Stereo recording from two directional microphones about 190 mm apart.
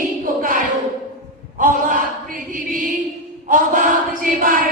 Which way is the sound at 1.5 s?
45° right (ahead or behind).